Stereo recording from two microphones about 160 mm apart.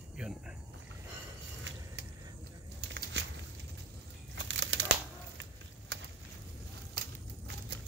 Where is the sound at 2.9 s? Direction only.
90° right.